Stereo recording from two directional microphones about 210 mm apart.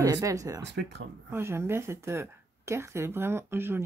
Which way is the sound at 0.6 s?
55° right (ahead or behind).